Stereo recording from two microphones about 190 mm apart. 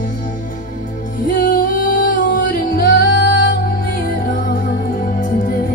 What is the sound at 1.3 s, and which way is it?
Music, 45° left (ahead or behind).